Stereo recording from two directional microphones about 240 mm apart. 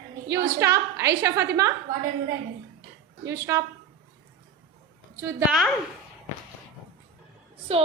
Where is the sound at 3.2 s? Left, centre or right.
Centre.